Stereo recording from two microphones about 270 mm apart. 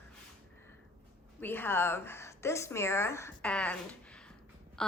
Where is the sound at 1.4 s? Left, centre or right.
Centre.